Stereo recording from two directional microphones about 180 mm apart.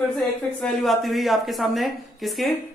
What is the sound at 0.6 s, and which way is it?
Speech, centre (ahead or behind).